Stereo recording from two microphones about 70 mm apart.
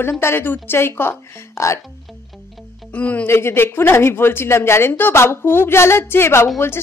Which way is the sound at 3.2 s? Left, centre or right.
Left.